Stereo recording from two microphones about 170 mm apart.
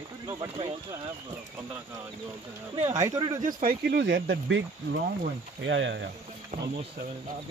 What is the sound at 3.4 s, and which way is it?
Speech, 65° right (ahead or behind).